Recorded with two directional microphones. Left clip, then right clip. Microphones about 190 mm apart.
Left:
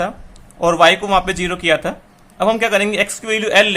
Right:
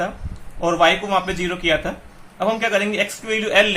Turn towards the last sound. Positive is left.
turn(degrees=35)  # may be behind; listen again after turning